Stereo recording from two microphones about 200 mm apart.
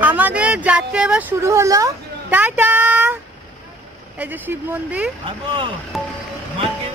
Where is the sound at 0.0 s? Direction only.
10° right (ahead or behind).